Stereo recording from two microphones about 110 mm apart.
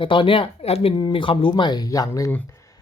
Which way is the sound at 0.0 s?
50° left (ahead or behind).